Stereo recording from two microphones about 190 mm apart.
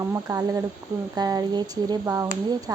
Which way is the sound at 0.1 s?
15° right (ahead or behind).